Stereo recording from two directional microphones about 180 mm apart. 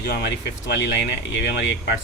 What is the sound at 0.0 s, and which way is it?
Speech, 65° left (ahead or behind).